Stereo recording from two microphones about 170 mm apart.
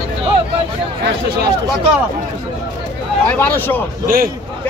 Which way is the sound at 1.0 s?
75° right (ahead or behind).